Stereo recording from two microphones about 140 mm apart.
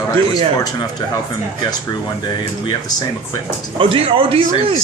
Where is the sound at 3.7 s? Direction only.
40° right (ahead or behind).